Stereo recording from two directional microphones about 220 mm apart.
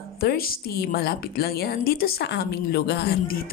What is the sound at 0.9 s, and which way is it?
A woman's voice, 45° left (ahead or behind).